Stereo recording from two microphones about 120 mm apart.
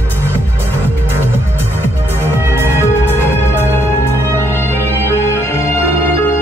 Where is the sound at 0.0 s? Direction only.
20° right (ahead or behind).